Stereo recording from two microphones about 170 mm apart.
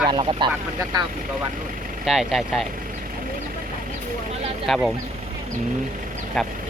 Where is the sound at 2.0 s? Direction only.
Centre (ahead or behind).